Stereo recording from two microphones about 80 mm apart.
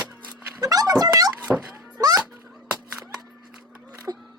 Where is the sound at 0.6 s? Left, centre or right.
Right.